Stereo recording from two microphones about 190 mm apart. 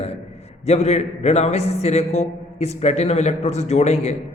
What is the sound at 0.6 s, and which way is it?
A man's voice, 35° left (ahead or behind).